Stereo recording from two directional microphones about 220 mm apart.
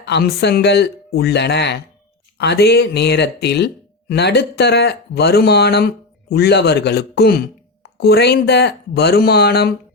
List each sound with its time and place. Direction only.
0.0 s speech: 50° left (ahead or behind)